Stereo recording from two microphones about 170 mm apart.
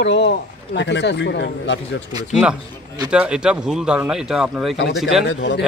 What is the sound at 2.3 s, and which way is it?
A man's voice, 5° right (ahead or behind).